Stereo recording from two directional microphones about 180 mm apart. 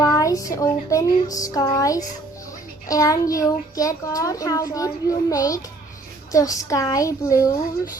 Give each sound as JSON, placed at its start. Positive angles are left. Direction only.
{"t": 0.0, "sound": "speech", "side_deg": 20}